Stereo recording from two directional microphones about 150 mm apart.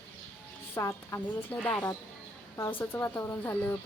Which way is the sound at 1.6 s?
5° left (ahead or behind).